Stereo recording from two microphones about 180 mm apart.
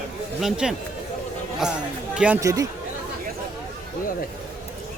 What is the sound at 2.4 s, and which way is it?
Speech, 20° right (ahead or behind).